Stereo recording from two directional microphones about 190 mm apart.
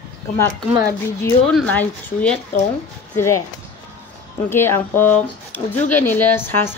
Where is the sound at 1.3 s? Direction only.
5° left (ahead or behind).